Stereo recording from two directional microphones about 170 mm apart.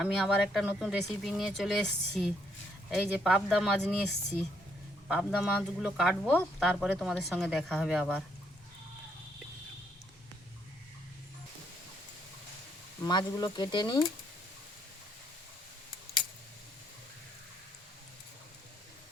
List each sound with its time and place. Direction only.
0.0 s speech: 5° right (ahead or behind)
5.0 s speech: centre (ahead or behind)
13.0 s speech: 25° left (ahead or behind)